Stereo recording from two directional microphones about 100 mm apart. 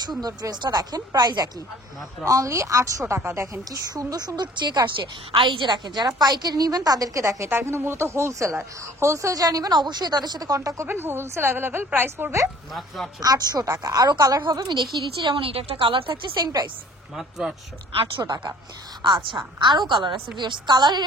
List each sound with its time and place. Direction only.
0.2 s a woman's voice: 40° right (ahead or behind); by 3.8 s 25° right (ahead or behind)
3.9 s a woman's voice: 40° right (ahead or behind)
10.9 s a woman's voice: 20° right (ahead or behind)
12.7 s a man's voice: centre (ahead or behind)
13.2 s a woman's voice: 40° right (ahead or behind)
17.1 s a man's voice: 5° right (ahead or behind)
18.2 s a woman's voice: 45° right (ahead or behind)